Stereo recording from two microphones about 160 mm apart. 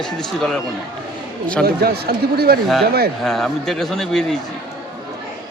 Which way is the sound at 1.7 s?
75° right (ahead or behind).